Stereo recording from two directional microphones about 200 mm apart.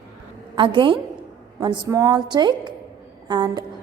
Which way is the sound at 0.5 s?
25° right (ahead or behind).